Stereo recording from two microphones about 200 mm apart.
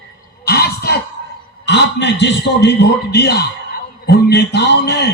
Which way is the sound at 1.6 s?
60° left (ahead or behind).